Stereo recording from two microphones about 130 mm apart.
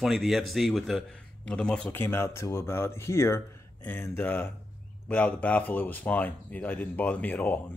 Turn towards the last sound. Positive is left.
turn(degrees=15)  # may be behind; listen again after turning